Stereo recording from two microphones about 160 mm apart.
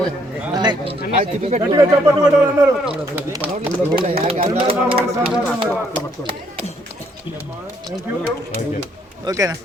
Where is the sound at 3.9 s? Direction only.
35° right (ahead or behind).